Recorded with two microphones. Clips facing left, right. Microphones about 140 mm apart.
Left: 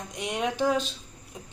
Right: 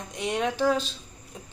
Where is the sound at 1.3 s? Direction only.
15° left (ahead or behind).